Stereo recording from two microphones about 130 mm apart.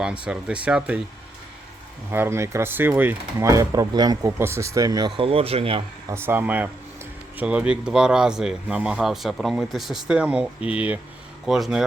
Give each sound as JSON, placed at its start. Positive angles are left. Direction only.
{"t": 0.0, "sound": "speech", "side_deg": -5}
{"t": 2.1, "sound": "speech", "side_deg": -20}
{"t": 6.1, "sound": "speech", "side_deg": -20}